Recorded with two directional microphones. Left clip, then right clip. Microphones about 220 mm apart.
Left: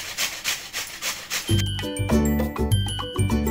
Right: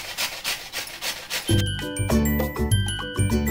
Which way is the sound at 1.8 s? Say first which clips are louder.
Left 1 dB; centre (ahead or behind).